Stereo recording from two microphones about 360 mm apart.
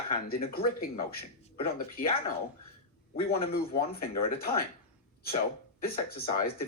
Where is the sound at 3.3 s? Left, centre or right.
Left.